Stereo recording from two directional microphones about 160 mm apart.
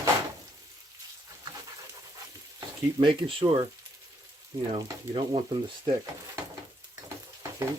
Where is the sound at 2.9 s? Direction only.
30° right (ahead or behind).